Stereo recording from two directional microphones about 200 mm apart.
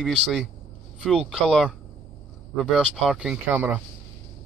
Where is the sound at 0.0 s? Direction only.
Centre (ahead or behind).